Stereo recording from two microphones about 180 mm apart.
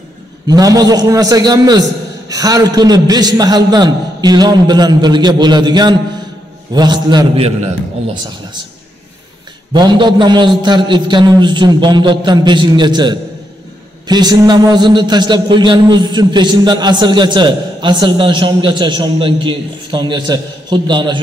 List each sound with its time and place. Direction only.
0.5 s a man's voice: 20° right (ahead or behind)
9.7 s a man's voice: 25° right (ahead or behind)